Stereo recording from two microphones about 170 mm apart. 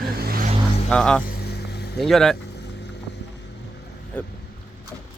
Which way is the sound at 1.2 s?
65° left (ahead or behind).